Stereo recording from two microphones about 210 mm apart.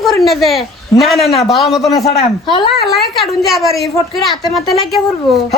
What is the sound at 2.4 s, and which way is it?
Speech, 20° left (ahead or behind).